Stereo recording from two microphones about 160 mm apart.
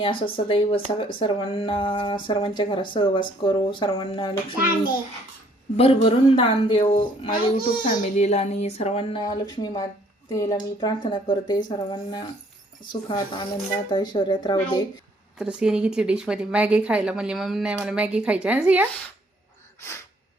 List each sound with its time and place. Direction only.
0.4 s speech: 35° left (ahead or behind)
5.7 s speech: 40° left (ahead or behind)
7.3 s a child's voice: 65° left (ahead or behind); by 9.2 s 40° left (ahead or behind)
9.2 s a woman's voice: 25° left (ahead or behind)
15.4 s a woman's voice: 5° right (ahead or behind)